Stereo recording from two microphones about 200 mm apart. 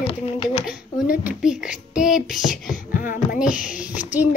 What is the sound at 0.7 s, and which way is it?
A child's voice, 5° right (ahead or behind).